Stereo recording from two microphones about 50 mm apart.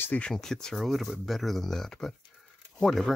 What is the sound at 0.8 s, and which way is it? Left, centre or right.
Speech, centre.